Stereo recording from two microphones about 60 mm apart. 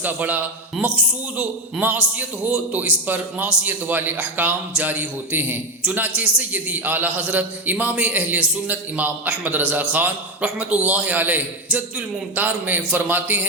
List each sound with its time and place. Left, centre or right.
0.0 s a man's voice: right